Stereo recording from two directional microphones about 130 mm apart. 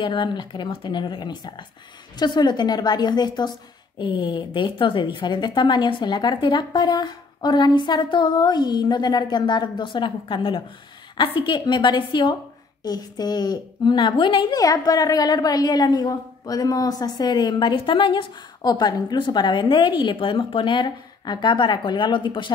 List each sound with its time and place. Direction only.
0.0 s a woman's voice: 35° left (ahead or behind)